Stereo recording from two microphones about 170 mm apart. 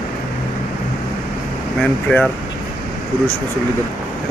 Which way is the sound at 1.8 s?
10° left (ahead or behind).